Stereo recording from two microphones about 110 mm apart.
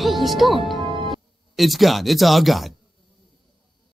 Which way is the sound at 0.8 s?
50° right (ahead or behind).